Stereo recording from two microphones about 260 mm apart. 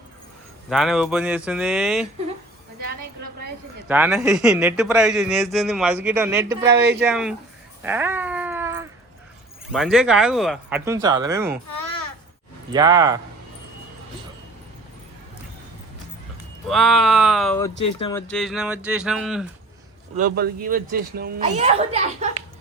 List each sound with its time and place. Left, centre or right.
0.7 s a man's voice: centre
3.8 s a man's voice: centre
7.9 s a sound: centre
9.7 s a man's voice: centre
12.7 s speech: centre
16.6 s a man's voice: centre
20.1 s speech: right